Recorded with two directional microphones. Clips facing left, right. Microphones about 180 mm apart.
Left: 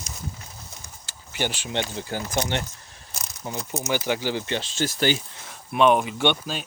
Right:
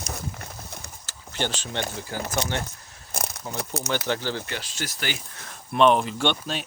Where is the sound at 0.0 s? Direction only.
60° right (ahead or behind).